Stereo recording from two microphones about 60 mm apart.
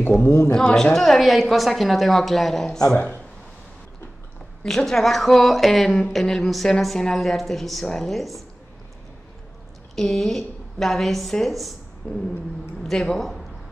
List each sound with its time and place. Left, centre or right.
0.5 s a man's voice: centre
0.9 s a woman's voice: centre
4.6 s a woman's voice: centre
9.9 s a woman's voice: centre
12.0 s a sound: left
12.8 s a man's voice: centre